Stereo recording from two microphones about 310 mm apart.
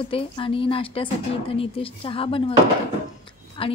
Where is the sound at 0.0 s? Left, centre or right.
Centre.